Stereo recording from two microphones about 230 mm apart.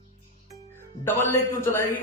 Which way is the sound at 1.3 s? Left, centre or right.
Centre.